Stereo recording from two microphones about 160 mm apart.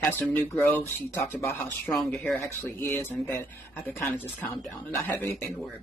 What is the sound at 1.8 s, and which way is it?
Speech, centre (ahead or behind).